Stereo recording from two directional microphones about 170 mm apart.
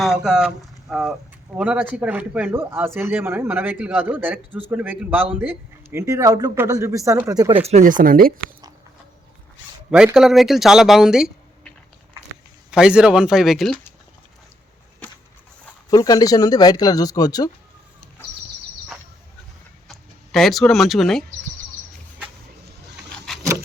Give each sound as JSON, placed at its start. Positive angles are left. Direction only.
{"t": 0.0, "sound": "speech", "side_deg": 0}
{"t": 7.5, "sound": "speech", "side_deg": -40}
{"t": 9.9, "sound": "speech", "side_deg": -5}
{"t": 12.7, "sound": "speech", "side_deg": -5}
{"t": 15.9, "sound": "speech", "side_deg": 20}
{"t": 19.9, "sound": "speech", "side_deg": 0}